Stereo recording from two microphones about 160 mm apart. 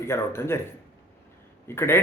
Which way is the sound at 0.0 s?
15° left (ahead or behind).